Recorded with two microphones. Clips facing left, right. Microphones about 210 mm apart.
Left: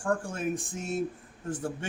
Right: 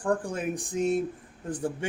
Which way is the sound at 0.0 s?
15° right (ahead or behind).